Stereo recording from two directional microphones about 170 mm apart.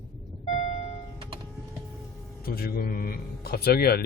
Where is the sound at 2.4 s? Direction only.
60° left (ahead or behind).